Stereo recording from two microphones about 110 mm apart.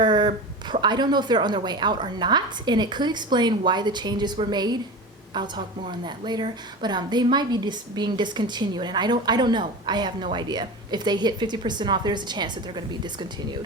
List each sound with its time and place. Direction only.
0.0 s speech: 45° right (ahead or behind)